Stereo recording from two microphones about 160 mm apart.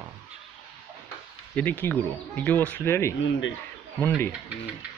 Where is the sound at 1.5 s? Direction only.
10° left (ahead or behind).